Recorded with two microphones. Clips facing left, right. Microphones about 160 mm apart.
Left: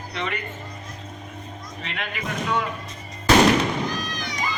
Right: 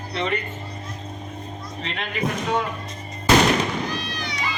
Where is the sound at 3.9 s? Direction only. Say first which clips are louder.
Even; 45° left (ahead or behind).